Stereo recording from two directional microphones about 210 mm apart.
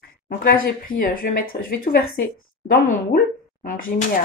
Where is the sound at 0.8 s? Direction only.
40° left (ahead or behind).